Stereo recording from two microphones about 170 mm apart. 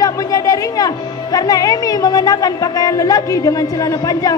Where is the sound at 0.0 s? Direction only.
20° left (ahead or behind).